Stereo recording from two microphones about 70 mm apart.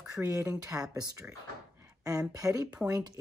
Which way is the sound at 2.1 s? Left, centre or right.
Right.